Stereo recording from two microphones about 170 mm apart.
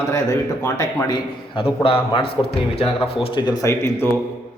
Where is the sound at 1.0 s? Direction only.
25° left (ahead or behind).